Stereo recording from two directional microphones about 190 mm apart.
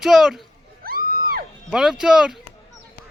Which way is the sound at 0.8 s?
50° right (ahead or behind).